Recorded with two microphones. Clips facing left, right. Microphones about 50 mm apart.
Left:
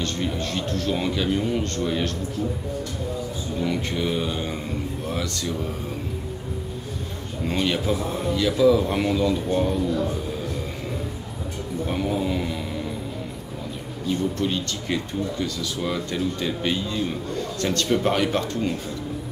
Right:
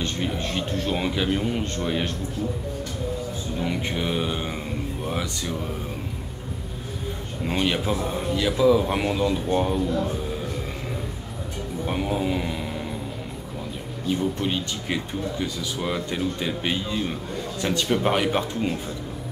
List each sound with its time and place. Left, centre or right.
0.0 s a man's voice: centre
3.6 s a man's voice: centre
7.4 s a man's voice: centre
11.8 s speech: centre
14.0 s a man's voice: centre